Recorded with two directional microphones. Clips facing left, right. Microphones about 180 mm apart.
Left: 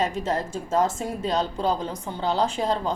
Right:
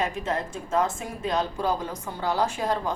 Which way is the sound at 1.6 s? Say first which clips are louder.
Left 2 dB; 20° left (ahead or behind).